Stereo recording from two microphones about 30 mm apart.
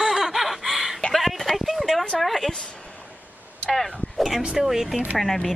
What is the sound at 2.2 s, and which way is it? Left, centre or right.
Speech, centre.